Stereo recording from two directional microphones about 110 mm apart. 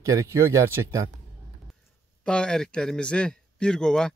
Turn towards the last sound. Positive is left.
turn(degrees=5)  # may be behind; listen again after turning